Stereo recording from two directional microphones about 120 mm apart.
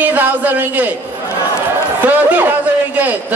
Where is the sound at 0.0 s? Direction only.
15° right (ahead or behind).